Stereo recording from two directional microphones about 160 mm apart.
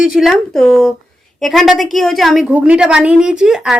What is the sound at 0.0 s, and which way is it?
A woman's voice, centre (ahead or behind).